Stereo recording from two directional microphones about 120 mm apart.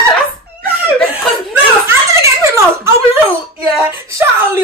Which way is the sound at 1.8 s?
25° right (ahead or behind).